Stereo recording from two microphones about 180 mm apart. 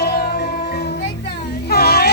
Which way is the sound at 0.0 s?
65° left (ahead or behind).